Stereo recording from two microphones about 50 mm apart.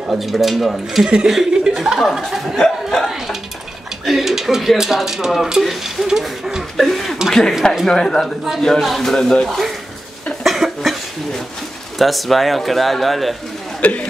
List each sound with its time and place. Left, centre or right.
0.1 s speech: centre
2.6 s speech: centre
4.0 s speech: centre
6.8 s a sound: centre
7.2 s speech: centre
10.4 s a sound: centre
12.0 s speech: centre
13.7 s speech: left